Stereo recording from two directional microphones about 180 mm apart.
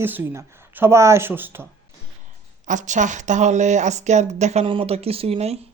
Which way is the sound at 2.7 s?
45° right (ahead or behind).